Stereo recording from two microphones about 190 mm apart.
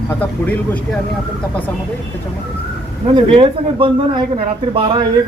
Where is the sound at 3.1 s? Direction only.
25° right (ahead or behind).